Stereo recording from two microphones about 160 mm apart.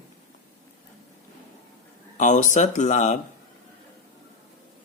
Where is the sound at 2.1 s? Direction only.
50° left (ahead or behind).